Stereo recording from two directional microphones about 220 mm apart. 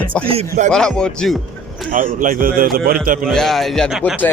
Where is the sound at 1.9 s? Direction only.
35° right (ahead or behind).